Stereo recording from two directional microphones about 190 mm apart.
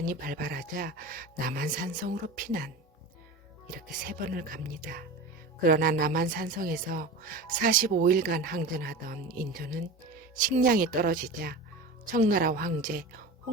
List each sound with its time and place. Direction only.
0.0 s speech: 50° right (ahead or behind)
3.7 s speech: 45° right (ahead or behind)